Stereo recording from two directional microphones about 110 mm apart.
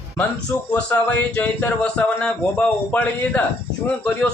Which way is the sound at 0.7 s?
10° left (ahead or behind).